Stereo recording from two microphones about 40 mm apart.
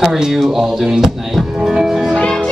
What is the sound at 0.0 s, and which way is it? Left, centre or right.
Speech, centre.